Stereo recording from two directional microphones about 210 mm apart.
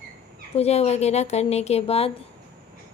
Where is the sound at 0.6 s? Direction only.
30° left (ahead or behind).